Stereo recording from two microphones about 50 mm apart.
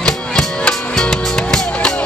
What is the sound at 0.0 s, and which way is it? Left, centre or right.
Music, centre.